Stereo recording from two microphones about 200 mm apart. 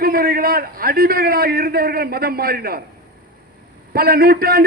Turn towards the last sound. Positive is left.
turn(degrees=-50)  # may be behind; listen again after turning